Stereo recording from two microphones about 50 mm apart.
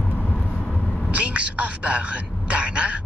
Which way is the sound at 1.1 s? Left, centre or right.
Right.